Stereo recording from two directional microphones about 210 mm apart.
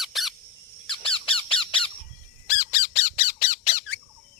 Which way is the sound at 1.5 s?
5° left (ahead or behind).